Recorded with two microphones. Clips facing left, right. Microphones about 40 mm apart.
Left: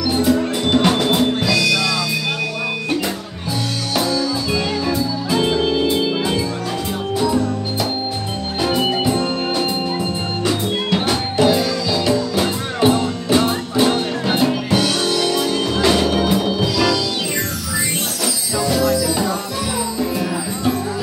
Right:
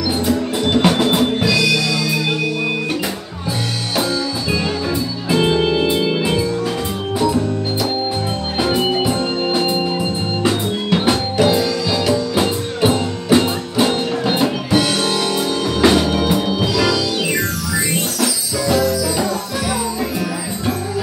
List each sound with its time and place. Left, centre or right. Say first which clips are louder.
0.7 s music: right 1 dB; centre
4.5 s music: even; centre
8.5 s music: right 1 dB; centre
9.1 s music: right 1 dB; right
10.9 s music: right 5 dB; centre
14.8 s music: right 1 dB; right
15.9 s music: right 1 dB; centre
16.2 s music: even; right
16.4 s music: even; centre